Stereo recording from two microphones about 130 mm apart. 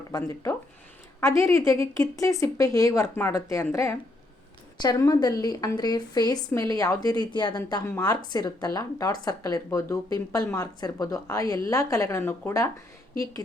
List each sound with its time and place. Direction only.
0.1 s a woman's voice: 25° left (ahead or behind)